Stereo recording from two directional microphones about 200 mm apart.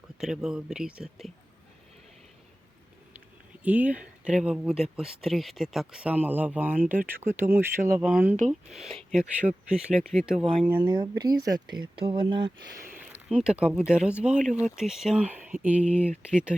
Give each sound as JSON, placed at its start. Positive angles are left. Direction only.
{"t": 0.2, "sound": "speech", "side_deg": -5}
{"t": 3.6, "sound": "speech", "side_deg": -5}
{"t": 10.8, "sound": "speech", "side_deg": -20}
{"t": 12.8, "sound": "speech", "side_deg": -10}